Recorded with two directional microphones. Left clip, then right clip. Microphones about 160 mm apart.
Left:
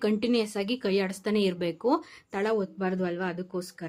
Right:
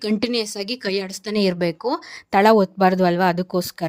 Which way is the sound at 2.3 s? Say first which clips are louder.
Right 14 dB; 60° right (ahead or behind).